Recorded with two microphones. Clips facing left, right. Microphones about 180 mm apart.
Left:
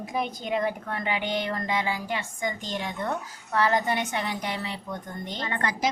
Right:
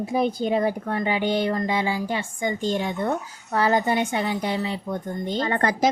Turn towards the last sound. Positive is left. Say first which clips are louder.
# right 7 dB
turn(degrees=-40)  # may be behind; listen again after turning